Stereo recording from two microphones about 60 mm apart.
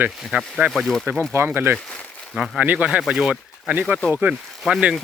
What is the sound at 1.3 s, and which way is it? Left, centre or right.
Speech, right.